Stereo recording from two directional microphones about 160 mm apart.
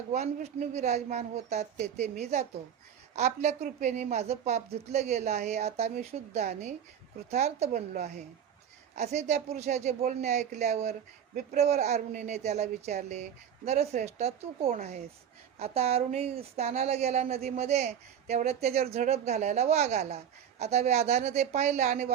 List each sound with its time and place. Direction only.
0.1 s speech: 45° right (ahead or behind)